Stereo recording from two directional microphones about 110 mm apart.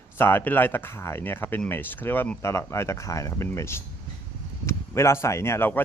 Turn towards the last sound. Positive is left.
turn(degrees=20)  # may be behind; listen again after turning